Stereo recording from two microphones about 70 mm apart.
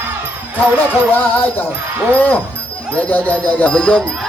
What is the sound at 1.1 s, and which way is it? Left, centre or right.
Speech, left.